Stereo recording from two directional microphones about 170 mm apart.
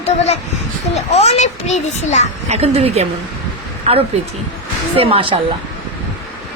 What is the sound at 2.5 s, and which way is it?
Speech, 35° right (ahead or behind).